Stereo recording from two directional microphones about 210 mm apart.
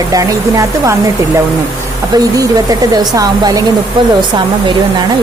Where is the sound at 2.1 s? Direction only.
20° right (ahead or behind).